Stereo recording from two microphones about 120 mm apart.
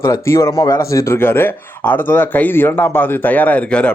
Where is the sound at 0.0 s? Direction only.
25° left (ahead or behind).